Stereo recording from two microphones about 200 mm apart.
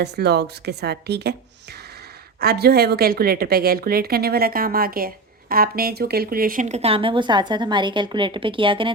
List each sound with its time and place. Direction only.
0.0 s speech: 55° right (ahead or behind)
2.4 s a woman's voice: 50° right (ahead or behind); by 8.9 s 25° right (ahead or behind)